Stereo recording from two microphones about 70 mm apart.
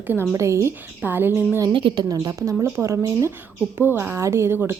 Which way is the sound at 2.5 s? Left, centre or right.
Right.